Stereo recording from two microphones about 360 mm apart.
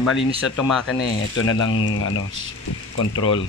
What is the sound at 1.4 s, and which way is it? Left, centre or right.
Speech, left.